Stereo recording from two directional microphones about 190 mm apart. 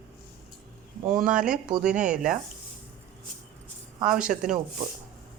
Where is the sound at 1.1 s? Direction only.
45° right (ahead or behind).